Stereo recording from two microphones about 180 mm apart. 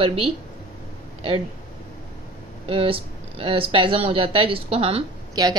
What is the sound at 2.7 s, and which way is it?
Speech, 30° right (ahead or behind).